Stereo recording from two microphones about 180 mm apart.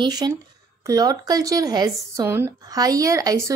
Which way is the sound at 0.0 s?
20° right (ahead or behind).